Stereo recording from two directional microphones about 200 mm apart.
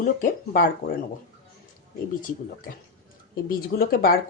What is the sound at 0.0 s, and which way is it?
Speech, 45° left (ahead or behind).